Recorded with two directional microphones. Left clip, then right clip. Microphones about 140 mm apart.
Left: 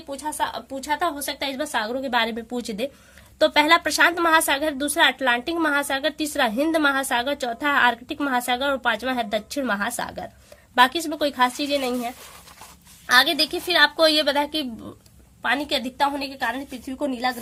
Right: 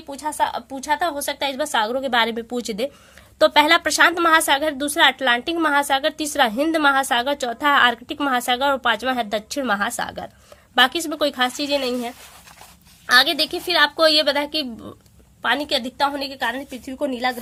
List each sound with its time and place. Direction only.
0.1 s a woman's voice: 45° right (ahead or behind)
13.1 s a woman's voice: 30° right (ahead or behind)